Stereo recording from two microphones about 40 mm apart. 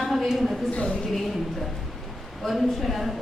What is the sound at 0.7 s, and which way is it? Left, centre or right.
Speech, left.